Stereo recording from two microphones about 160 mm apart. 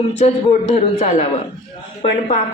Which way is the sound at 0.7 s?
35° left (ahead or behind).